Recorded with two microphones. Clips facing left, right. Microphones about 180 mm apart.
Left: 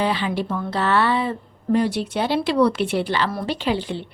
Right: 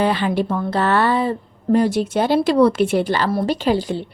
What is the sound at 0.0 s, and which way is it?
A woman's voice, 50° right (ahead or behind).